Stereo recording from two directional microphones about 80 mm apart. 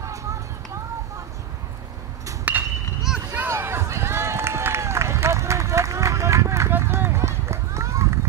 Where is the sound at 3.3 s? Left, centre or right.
Right.